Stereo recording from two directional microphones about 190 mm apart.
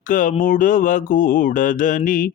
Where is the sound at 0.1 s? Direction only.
45° left (ahead or behind).